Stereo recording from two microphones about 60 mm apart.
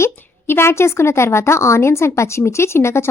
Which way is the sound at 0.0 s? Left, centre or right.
Left.